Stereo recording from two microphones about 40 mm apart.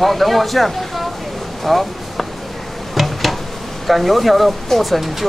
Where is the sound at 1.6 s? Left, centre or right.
Centre.